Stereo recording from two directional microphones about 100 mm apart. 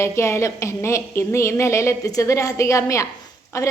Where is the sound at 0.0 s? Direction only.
25° left (ahead or behind).